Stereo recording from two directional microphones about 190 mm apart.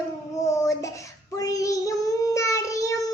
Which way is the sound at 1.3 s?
15° left (ahead or behind).